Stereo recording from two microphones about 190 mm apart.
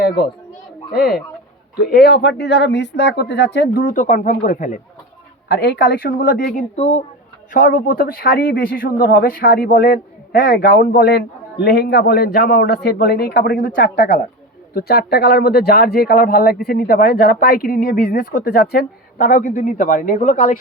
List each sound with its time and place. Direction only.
1.8 s speech: 55° left (ahead or behind)
5.5 s speech: 60° left (ahead or behind)
6.7 s speech: 30° left (ahead or behind)
7.5 s speech: 45° left (ahead or behind)